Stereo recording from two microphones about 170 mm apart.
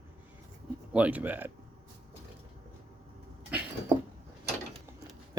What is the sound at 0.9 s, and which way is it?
Speech, 10° right (ahead or behind).